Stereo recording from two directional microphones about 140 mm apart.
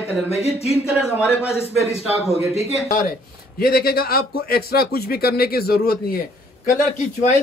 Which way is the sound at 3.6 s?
90° left.